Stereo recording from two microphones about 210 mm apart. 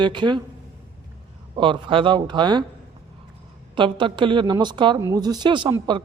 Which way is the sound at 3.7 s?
25° right (ahead or behind).